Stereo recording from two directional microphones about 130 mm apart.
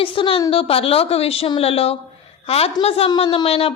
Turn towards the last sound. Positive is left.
turn(degrees=50)  # may be behind; listen again after turning